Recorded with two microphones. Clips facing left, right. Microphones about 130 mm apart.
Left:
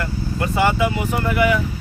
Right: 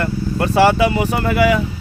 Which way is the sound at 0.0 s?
70° right (ahead or behind).